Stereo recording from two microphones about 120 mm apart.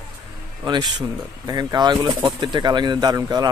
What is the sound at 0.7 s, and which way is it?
Speech, 40° right (ahead or behind).